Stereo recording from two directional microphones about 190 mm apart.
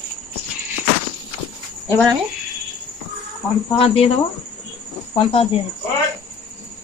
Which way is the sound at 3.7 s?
30° left (ahead or behind).